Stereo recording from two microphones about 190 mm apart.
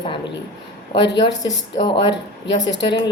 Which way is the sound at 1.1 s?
20° left (ahead or behind).